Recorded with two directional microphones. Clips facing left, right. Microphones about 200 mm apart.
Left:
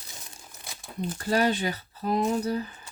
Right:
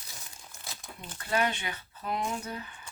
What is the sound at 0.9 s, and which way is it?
Speech, 35° left (ahead or behind).